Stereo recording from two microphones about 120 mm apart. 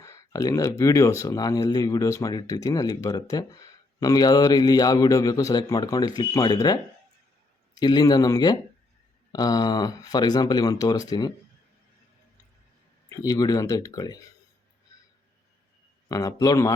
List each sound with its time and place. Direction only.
0.0 s speech: 30° left (ahead or behind)
7.8 s speech: 35° left (ahead or behind)
13.1 s speech: 30° left (ahead or behind)
16.0 s a man's voice: 30° left (ahead or behind)